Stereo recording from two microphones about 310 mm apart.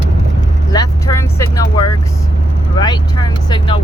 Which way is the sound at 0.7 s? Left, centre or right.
Centre.